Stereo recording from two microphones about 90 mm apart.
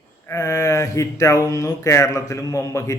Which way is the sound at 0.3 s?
35° left (ahead or behind).